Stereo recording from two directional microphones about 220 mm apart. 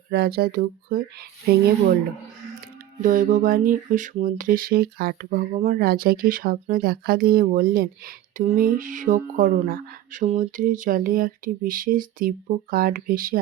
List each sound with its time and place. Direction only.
0.1 s speech: 45° right (ahead or behind)
3.0 s speech: 35° right (ahead or behind)